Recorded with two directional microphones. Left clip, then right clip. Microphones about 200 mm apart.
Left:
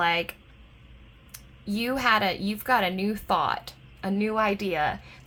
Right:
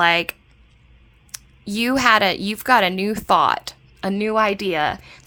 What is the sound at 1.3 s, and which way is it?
A woman's voice, 45° right (ahead or behind).